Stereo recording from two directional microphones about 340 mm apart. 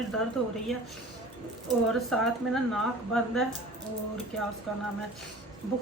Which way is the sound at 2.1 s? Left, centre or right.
Centre.